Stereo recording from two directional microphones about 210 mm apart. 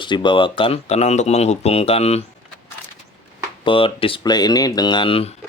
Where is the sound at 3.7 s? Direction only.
25° left (ahead or behind).